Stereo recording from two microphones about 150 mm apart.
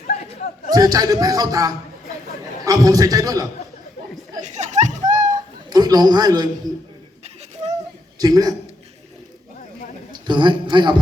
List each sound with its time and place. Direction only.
0.1 s a sound: 45° left (ahead or behind)
0.7 s speech: 25° right (ahead or behind)
4.4 s a sound: 50° right (ahead or behind)
5.7 s speech: 25° right (ahead or behind)
8.2 s speech: 25° right (ahead or behind)
10.2 s a man's voice: 30° right (ahead or behind)